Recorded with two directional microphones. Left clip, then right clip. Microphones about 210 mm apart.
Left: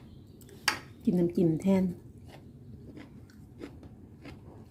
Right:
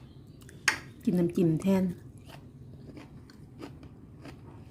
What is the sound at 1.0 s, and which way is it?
Speech, 15° right (ahead or behind).